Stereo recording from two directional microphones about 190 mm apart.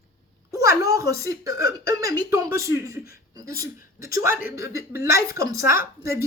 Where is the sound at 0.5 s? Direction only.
15° right (ahead or behind).